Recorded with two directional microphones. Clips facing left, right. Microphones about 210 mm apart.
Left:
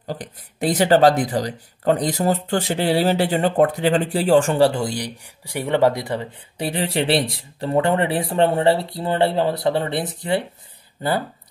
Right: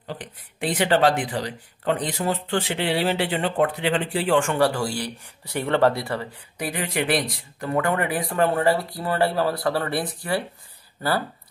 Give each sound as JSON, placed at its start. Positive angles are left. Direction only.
{"t": 0.0, "sound": "speech", "side_deg": 40}
{"t": 6.6, "sound": "speech", "side_deg": 30}